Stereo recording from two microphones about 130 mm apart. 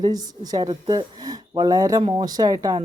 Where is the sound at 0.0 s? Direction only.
30° right (ahead or behind).